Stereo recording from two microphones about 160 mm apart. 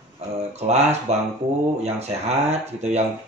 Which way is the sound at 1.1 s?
40° right (ahead or behind).